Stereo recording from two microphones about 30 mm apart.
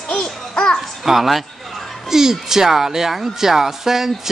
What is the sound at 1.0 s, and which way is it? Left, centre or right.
Speech, centre.